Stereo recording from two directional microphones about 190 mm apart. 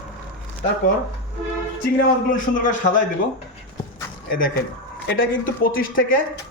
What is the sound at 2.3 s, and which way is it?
Speech, 45° left (ahead or behind).